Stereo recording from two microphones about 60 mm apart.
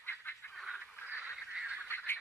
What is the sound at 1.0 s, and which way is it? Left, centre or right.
Goose, right.